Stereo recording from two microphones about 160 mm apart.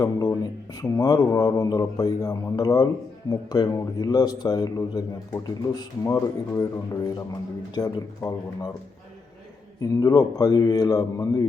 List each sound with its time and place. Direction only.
0.0 s speech: 20° left (ahead or behind)
7.8 s speech: 20° left (ahead or behind)
9.9 s speech: 20° left (ahead or behind)